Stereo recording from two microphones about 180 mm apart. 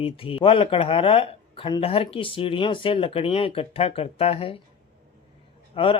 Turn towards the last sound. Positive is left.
turn(degrees=30)  # may be behind; listen again after turning